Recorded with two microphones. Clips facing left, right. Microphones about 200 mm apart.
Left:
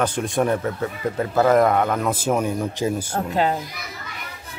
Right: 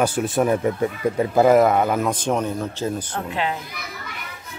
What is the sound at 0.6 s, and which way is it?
A man's voice, 15° right (ahead or behind).